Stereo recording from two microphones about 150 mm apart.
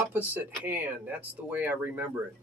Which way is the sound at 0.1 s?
10° right (ahead or behind).